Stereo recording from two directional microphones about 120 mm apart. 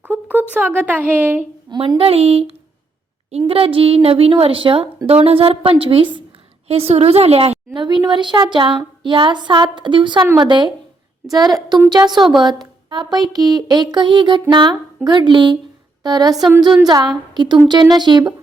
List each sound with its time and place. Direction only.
0.0 s a woman's voice: 15° right (ahead or behind)
2.0 s a woman's voice: 55° right (ahead or behind)
6.7 s a woman's voice: 55° right (ahead or behind)
7.7 s speech: 40° right (ahead or behind)
16.3 s a woman's voice: centre (ahead or behind)
16.8 s speech: 35° right (ahead or behind)